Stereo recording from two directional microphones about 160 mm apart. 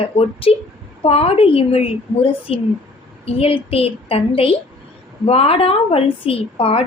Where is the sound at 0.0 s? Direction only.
35° left (ahead or behind).